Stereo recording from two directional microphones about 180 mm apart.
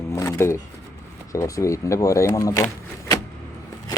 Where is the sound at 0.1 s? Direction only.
15° left (ahead or behind).